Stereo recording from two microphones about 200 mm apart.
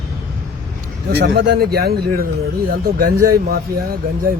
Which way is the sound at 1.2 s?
55° right (ahead or behind).